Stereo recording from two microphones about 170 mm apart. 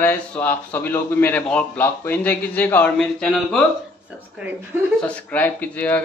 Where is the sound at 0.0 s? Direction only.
10° left (ahead or behind).